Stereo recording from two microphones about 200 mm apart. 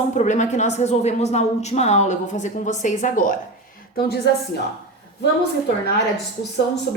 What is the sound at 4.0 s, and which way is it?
Speech, 50° left (ahead or behind).